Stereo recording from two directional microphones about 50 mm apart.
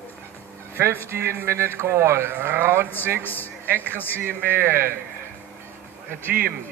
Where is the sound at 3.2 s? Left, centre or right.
Left.